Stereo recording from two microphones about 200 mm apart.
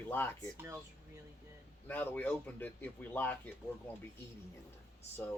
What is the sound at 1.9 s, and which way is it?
Speech, 10° left (ahead or behind).